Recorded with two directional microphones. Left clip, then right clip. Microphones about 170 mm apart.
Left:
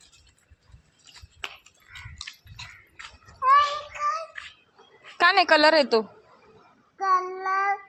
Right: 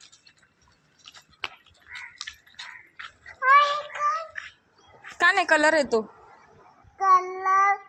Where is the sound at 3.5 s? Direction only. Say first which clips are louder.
Right 1 dB; 30° left (ahead or behind).